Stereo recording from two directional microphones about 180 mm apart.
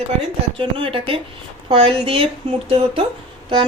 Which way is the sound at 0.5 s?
30° right (ahead or behind).